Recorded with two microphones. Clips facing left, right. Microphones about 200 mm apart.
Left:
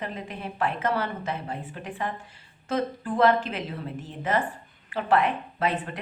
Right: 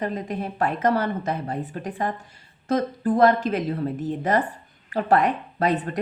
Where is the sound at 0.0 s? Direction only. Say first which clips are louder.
Right 7 dB; 40° right (ahead or behind).